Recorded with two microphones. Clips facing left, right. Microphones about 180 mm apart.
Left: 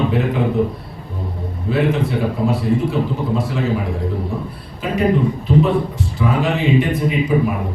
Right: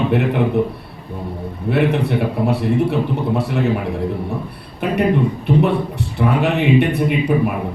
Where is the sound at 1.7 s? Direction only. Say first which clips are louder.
Right 1 dB; 65° right (ahead or behind).